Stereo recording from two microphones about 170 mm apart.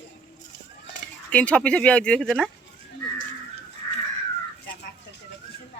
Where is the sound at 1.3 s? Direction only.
5° left (ahead or behind).